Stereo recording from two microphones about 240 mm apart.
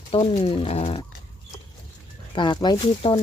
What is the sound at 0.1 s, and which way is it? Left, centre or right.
Speech, left.